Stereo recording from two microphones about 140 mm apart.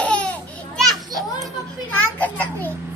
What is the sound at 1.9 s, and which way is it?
Speech, 10° left (ahead or behind).